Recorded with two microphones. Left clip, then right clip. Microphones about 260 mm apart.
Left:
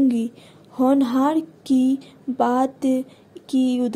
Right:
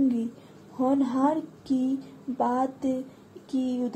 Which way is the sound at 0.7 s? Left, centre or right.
Left.